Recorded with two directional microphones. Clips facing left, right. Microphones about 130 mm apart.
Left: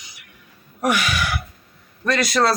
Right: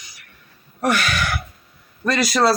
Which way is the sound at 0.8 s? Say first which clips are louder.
Even; 10° left (ahead or behind).